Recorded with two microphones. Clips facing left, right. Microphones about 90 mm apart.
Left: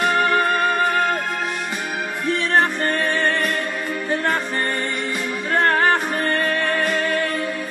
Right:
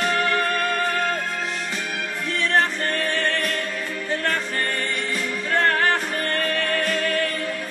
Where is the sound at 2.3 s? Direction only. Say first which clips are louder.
Left 3 dB; 20° left (ahead or behind).